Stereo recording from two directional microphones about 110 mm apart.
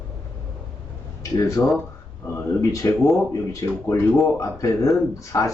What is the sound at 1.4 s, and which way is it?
Speech, 35° left (ahead or behind).